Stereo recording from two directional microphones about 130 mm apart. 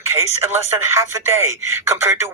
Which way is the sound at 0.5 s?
20° right (ahead or behind).